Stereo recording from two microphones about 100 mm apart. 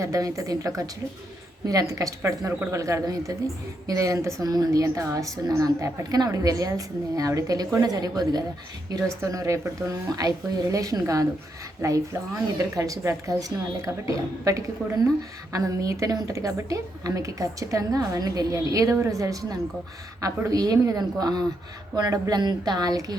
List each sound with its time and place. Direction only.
0.0 s a woman's voice: 35° right (ahead or behind)
14.8 s speech: 15° left (ahead or behind)
15.5 s a woman's voice: 35° right (ahead or behind)